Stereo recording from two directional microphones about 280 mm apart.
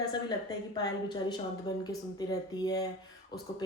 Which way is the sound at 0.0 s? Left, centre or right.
Centre.